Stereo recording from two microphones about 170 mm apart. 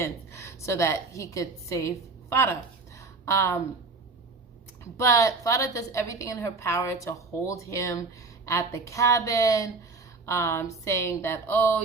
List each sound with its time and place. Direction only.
0.0 s a woman's voice: 15° left (ahead or behind)
4.8 s a woman's voice: 20° left (ahead or behind)